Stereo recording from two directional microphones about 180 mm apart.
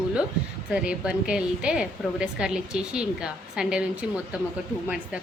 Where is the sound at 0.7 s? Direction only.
5° right (ahead or behind).